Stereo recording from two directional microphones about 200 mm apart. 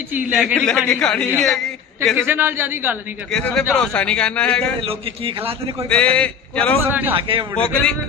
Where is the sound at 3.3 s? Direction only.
5° left (ahead or behind).